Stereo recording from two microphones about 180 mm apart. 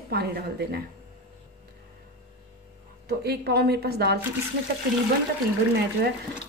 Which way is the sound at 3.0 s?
60° right (ahead or behind).